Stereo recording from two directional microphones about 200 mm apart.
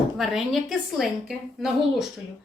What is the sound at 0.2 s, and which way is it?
Speech, centre (ahead or behind).